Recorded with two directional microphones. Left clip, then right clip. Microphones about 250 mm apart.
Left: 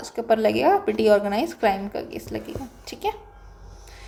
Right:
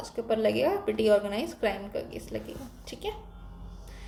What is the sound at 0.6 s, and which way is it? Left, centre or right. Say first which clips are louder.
Speech: left 7 dB; left.